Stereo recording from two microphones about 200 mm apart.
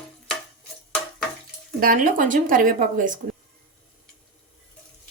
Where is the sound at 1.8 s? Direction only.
45° right (ahead or behind).